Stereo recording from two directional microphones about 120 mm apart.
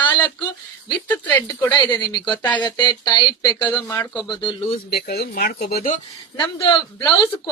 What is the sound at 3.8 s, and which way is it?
Speech, 20° left (ahead or behind).